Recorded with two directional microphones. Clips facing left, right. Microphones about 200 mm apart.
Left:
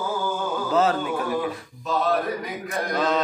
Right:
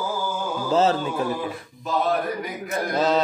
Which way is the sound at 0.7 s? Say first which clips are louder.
Right 2 dB; 25° right (ahead or behind).